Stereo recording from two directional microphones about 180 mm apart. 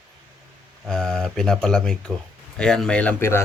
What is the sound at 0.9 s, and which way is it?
Speech, centre (ahead or behind).